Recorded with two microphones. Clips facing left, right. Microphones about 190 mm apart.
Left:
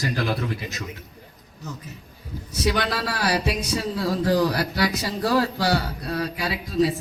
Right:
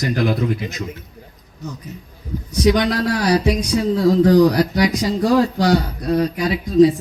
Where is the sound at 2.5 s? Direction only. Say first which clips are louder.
Right 8 dB; 15° right (ahead or behind).